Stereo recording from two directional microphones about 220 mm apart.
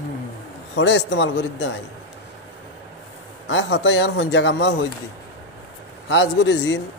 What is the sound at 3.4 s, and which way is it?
Speech, 55° left (ahead or behind).